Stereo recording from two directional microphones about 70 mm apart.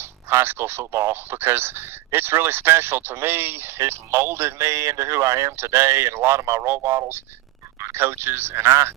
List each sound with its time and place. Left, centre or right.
0.3 s speech: right